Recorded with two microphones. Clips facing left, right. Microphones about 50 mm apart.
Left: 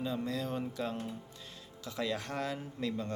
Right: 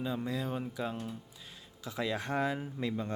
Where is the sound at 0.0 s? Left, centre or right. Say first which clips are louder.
Even; centre.